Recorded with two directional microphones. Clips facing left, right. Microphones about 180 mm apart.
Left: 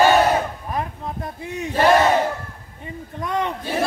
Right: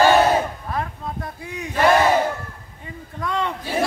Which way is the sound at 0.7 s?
20° left (ahead or behind).